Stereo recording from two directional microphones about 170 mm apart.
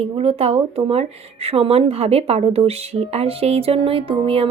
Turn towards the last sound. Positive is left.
turn(degrees=-35)  # may be behind; listen again after turning